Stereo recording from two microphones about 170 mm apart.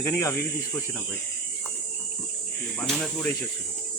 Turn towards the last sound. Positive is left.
turn(degrees=0)  # may be behind; listen again after turning